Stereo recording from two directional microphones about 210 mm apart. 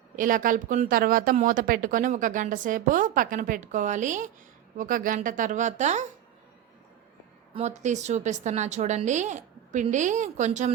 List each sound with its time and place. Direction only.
0.2 s speech: 40° right (ahead or behind)
7.5 s speech: 35° right (ahead or behind)